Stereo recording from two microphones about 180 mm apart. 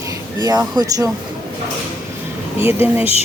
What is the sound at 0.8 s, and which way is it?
Speech, 20° right (ahead or behind).